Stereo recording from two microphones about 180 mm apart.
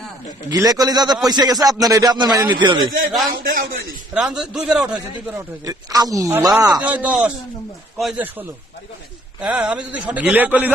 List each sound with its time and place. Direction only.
0.5 s a man's voice: 20° right (ahead or behind)
3.4 s a man's voice: 55° right (ahead or behind)
4.1 s a man's voice: 5° right (ahead or behind)
5.6 s a man's voice: 20° right (ahead or behind)
6.8 s a man's voice: 10° right (ahead or behind)